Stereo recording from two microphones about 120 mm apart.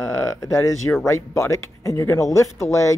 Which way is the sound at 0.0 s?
25° left (ahead or behind).